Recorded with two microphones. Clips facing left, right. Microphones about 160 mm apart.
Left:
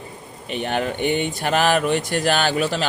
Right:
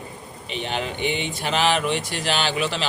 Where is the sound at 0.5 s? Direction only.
50° left (ahead or behind).